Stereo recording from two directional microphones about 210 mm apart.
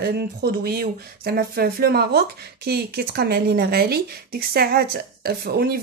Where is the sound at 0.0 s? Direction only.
50° right (ahead or behind).